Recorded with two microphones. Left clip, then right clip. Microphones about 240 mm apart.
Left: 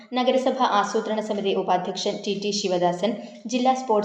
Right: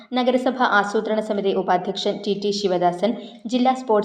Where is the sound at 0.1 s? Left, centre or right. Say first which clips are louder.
Right 1 dB; right.